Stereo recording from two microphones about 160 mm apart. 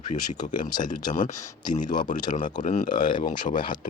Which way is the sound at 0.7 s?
25° left (ahead or behind).